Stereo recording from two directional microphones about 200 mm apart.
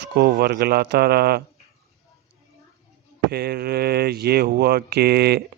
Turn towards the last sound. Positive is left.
turn(degrees=-50)  # may be behind; listen again after turning